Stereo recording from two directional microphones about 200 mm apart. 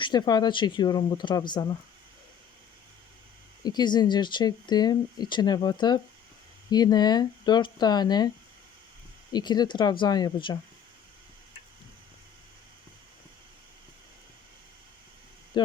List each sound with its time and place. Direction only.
0.0 s speech: 20° left (ahead or behind)
3.6 s speech: 20° left (ahead or behind)
9.3 s speech: 20° left (ahead or behind)
15.6 s speech: 25° left (ahead or behind)